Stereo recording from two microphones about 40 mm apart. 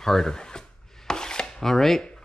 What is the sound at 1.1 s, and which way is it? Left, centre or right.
Chopping, centre.